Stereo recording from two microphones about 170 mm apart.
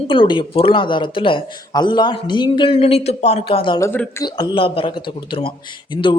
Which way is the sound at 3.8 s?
15° left (ahead or behind).